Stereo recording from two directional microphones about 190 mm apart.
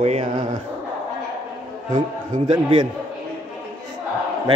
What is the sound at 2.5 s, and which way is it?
Speech, 25° right (ahead or behind).